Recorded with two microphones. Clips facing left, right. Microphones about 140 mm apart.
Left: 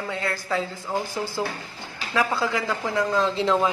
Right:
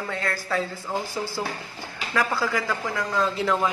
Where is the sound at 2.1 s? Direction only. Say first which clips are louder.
Left 1 dB; 20° left (ahead or behind).